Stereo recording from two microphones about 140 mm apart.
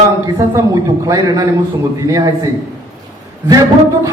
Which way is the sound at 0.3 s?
25° right (ahead or behind).